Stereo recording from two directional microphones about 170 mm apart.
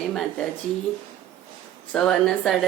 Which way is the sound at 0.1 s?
5° left (ahead or behind).